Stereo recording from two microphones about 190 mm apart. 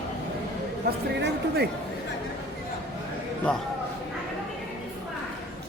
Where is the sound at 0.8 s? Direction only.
55° right (ahead or behind).